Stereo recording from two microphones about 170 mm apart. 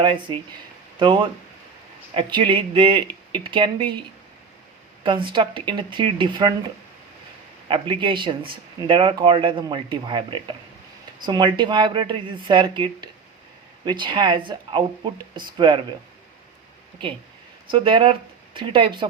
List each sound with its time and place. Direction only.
0.0 s speech: 30° right (ahead or behind)
5.0 s speech: 30° right (ahead or behind)
7.7 s speech: 30° right (ahead or behind)
17.7 s speech: 30° right (ahead or behind)